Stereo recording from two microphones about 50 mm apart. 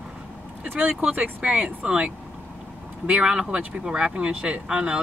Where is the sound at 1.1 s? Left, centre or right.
Right.